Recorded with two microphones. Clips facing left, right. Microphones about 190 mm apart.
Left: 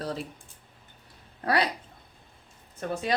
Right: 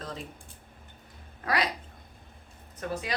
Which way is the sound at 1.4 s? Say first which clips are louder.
Left 3 dB; 30° left (ahead or behind).